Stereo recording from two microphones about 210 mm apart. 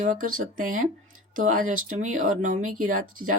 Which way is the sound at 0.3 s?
40° right (ahead or behind).